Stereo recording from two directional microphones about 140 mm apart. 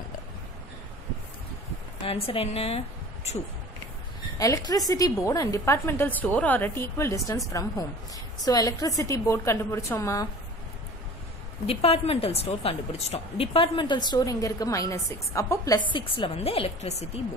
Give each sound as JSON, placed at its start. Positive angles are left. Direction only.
{"t": 2.0, "sound": "a woman's voice", "side_deg": 45}
{"t": 4.4, "sound": "a woman's voice", "side_deg": 25}
{"t": 11.6, "sound": "speech", "side_deg": 45}
{"t": 16.3, "sound": "a woman's voice", "side_deg": 45}